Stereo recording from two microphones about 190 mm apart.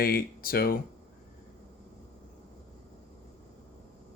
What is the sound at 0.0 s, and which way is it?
Speech, 50° left (ahead or behind).